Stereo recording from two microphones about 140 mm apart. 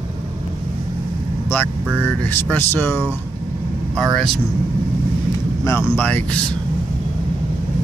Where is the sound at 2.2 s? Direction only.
15° left (ahead or behind).